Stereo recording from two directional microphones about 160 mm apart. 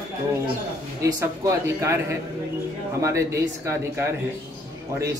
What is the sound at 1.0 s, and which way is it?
Speech, 20° right (ahead or behind).